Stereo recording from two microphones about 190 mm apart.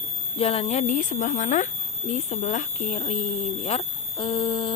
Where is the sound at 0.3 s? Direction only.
30° left (ahead or behind).